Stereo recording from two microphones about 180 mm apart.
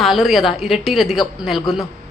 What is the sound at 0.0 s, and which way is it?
A woman's voice, centre (ahead or behind).